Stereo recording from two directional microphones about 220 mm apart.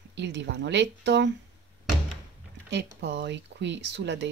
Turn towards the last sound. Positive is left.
turn(degrees=-55)  # may be behind; listen again after turning